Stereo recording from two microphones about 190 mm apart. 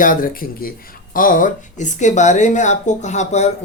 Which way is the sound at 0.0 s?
45° left (ahead or behind).